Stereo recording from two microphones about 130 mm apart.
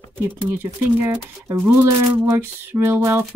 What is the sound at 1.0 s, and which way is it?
A woman's voice, 25° right (ahead or behind).